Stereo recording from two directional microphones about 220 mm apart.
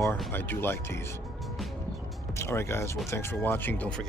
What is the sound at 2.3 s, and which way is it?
Speech, 10° left (ahead or behind).